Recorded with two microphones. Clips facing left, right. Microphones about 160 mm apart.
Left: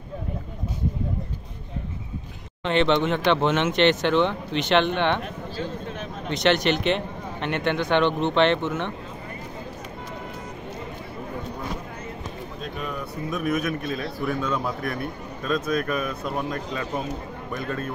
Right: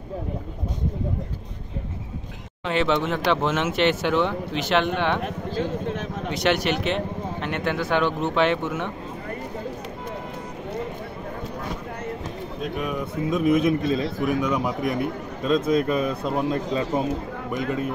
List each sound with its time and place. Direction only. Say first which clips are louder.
2.6 s speech: left 2 dB; 5° right (ahead or behind)
6.3 s speech: left 2 dB; 5° right (ahead or behind)
12.6 s speech: right 5 dB; 10° right (ahead or behind)
13.0 s a man's voice: right 6 dB; 25° right (ahead or behind)